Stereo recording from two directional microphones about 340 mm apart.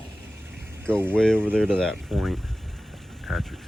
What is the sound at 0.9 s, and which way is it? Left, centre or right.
Speech, centre.